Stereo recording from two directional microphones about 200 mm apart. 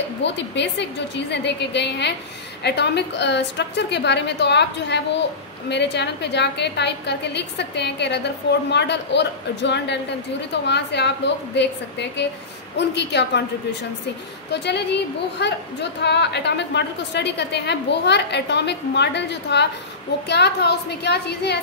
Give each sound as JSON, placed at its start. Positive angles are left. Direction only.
{"t": 0.2, "sound": "a woman's voice", "side_deg": 60}
{"t": 14.5, "sound": "a woman's voice", "side_deg": 60}